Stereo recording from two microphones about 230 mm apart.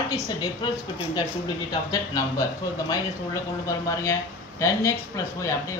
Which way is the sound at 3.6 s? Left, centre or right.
Centre.